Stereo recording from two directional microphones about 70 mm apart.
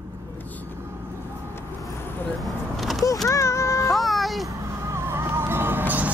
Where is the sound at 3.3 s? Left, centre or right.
Left.